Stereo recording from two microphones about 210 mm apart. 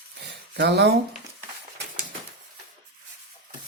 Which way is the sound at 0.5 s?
55° right (ahead or behind).